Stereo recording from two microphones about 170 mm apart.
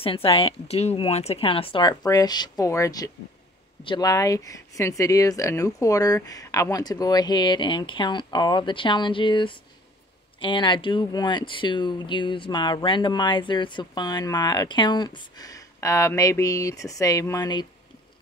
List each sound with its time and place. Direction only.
0.0 s a woman's voice: 35° left (ahead or behind)